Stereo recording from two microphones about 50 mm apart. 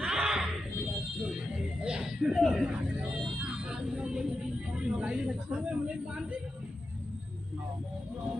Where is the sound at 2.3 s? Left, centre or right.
Centre.